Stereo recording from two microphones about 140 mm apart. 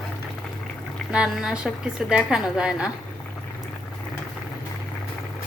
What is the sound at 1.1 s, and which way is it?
A woman's voice, 5° right (ahead or behind).